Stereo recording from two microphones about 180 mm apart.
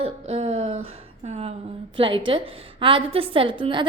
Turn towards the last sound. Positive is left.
turn(degrees=-25)  # may be behind; listen again after turning